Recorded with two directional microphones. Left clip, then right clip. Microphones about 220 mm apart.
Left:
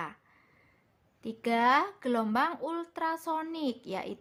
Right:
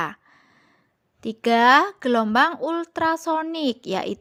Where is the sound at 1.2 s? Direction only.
35° right (ahead or behind).